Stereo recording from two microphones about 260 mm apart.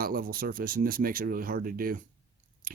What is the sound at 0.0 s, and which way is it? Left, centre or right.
Speech, right.